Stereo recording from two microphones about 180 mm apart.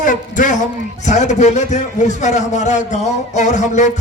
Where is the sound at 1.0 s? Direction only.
40° left (ahead or behind).